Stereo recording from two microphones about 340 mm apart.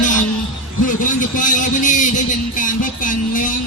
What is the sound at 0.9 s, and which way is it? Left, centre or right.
Music, left.